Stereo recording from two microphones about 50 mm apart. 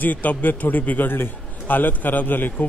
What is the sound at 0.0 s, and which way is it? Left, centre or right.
A man's voice, left.